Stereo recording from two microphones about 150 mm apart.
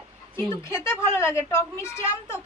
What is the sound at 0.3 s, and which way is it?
A woman's voice, 15° left (ahead or behind).